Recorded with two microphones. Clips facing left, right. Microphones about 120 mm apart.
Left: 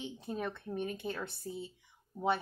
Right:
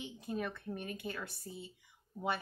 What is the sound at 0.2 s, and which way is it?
A woman's voice, 25° left (ahead or behind).